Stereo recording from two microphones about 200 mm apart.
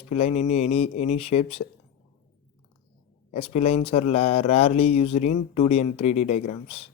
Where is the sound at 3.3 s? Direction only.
30° left (ahead or behind).